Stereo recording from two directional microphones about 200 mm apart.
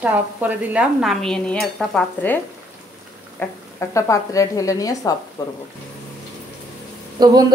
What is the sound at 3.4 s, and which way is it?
Speech, 15° left (ahead or behind).